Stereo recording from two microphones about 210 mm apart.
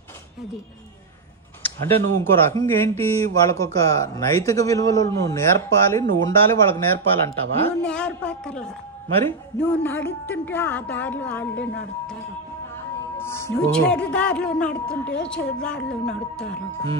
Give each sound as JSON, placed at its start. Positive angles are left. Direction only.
{"t": 1.6, "sound": "a woman's voice", "side_deg": 10}
{"t": 13.2, "sound": "speech", "side_deg": 10}